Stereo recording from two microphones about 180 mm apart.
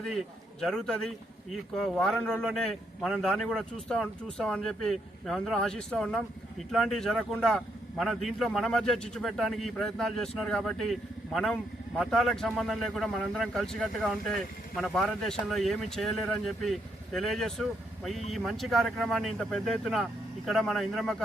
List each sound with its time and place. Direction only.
0.6 s a man's voice: 5° left (ahead or behind)